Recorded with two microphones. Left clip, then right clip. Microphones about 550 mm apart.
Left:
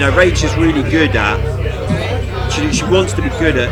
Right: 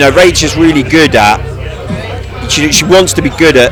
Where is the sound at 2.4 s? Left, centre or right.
Right.